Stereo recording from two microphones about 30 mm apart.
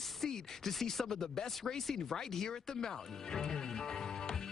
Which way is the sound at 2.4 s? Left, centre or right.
Left.